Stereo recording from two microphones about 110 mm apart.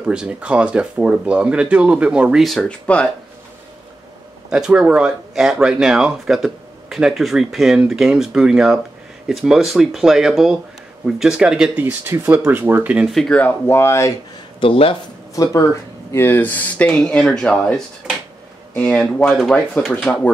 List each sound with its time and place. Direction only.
0.0 s speech: 10° right (ahead or behind)
4.5 s speech: 5° right (ahead or behind)
11.8 s speech: 15° right (ahead or behind)
13.0 s speech: centre (ahead or behind)
13.4 s speech: 20° left (ahead or behind)
14.6 s speech: 55° left (ahead or behind)
15.3 s speech: 30° left (ahead or behind); by 20.2 s 15° left (ahead or behind)